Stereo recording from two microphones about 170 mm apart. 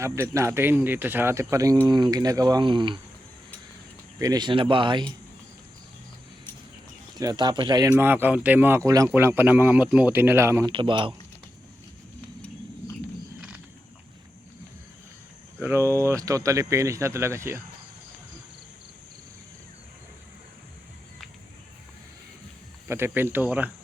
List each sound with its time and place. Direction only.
0.0 s speech: 15° right (ahead or behind)
4.2 s speech: 25° right (ahead or behind)
7.2 s speech: 25° right (ahead or behind)
10.7 s speech: 30° right (ahead or behind)
15.6 s speech: 15° right (ahead or behind)
22.9 s speech: 15° right (ahead or behind)